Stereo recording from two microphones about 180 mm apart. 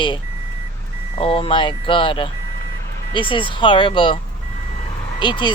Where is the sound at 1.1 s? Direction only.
30° left (ahead or behind).